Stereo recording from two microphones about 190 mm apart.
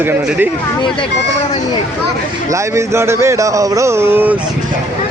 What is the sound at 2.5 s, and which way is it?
Speech, 15° right (ahead or behind).